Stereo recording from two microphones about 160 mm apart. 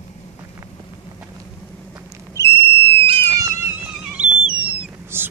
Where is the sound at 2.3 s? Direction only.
15° left (ahead or behind).